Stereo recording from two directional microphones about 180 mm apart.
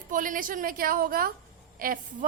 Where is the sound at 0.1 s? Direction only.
50° right (ahead or behind).